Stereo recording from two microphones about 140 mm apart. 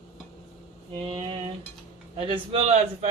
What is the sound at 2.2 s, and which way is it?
Speech, 40° right (ahead or behind).